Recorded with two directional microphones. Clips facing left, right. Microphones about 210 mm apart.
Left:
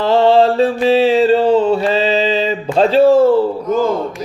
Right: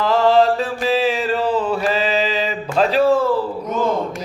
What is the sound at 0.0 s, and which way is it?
Mantra, 30° left (ahead or behind).